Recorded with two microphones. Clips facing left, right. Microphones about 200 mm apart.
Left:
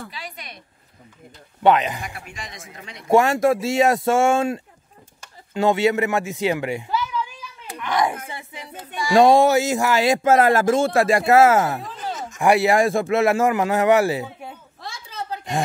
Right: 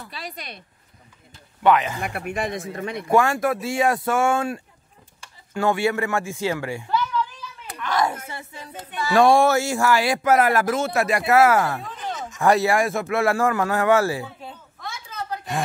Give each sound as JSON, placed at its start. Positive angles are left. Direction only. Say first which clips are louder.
{"t": 1.6, "sound": "speech", "louder": "left 2 dB", "side_deg": 25}
{"t": 2.0, "sound": "speech", "louder": "right 8 dB", "side_deg": -60}
{"t": 3.1, "sound": "speech", "louder": "left 4 dB", "side_deg": 25}
{"t": 6.9, "sound": "a sound", "louder": "right 1 dB", "side_deg": 10}
{"t": 8.3, "sound": "speech", "louder": "left 1 dB", "side_deg": 15}
{"t": 14.8, "sound": "a sound", "louder": "even", "side_deg": 30}